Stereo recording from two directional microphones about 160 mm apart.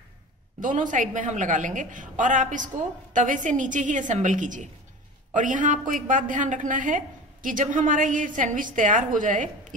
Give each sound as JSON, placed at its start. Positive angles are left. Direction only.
{"t": 0.6, "sound": "a woman's voice", "side_deg": -55}